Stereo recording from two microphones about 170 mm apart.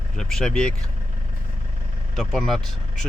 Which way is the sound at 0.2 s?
5° left (ahead or behind).